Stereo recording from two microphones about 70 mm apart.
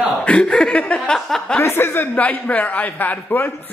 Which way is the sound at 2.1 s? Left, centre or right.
Left.